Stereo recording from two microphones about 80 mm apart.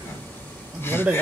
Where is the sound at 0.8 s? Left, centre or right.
Left.